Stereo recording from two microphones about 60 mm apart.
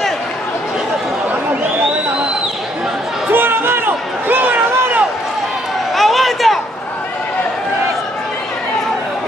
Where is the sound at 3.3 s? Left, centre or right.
Right.